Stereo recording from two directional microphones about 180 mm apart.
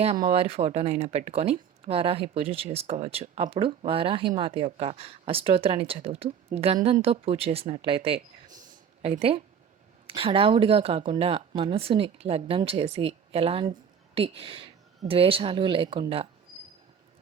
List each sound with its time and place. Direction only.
0.2 s speech: 30° right (ahead or behind)
8.4 s a sound: 40° right (ahead or behind)
10.1 s speech: 30° right (ahead or behind)